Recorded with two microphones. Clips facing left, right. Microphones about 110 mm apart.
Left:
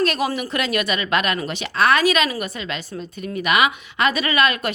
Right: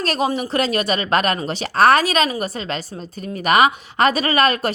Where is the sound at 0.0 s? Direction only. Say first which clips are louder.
Right 1 dB; 35° right (ahead or behind).